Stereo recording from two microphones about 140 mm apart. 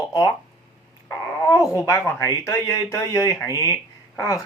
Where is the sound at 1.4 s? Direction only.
25° left (ahead or behind).